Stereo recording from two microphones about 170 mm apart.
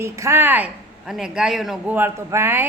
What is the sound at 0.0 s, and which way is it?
A woman's voice, 15° right (ahead or behind).